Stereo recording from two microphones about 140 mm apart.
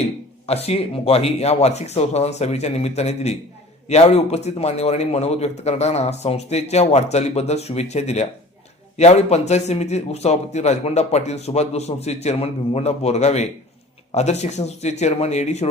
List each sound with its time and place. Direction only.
0.4 s a man's voice: 45° left (ahead or behind)